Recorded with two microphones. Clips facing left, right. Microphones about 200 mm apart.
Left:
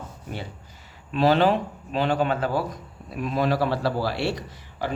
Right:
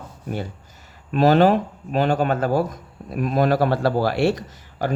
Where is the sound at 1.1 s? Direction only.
45° right (ahead or behind).